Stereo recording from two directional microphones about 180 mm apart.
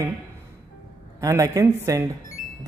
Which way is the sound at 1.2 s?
20° right (ahead or behind).